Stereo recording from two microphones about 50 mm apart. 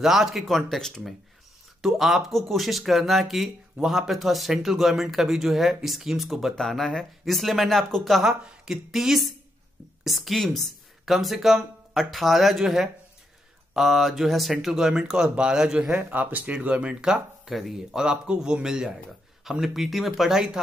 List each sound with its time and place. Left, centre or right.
0.0 s speech: centre
1.8 s speech: centre
6.5 s speech: centre
8.2 s speech: centre
16.0 s speech: right
16.5 s speech: right
17.5 s speech: centre